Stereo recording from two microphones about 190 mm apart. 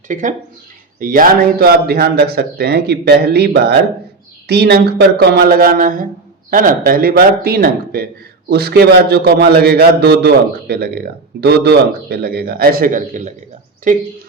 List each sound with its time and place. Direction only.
0.1 s a man's voice: 40° right (ahead or behind)